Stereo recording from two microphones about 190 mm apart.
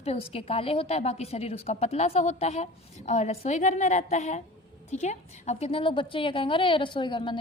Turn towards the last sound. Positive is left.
turn(degrees=25)  # may be behind; listen again after turning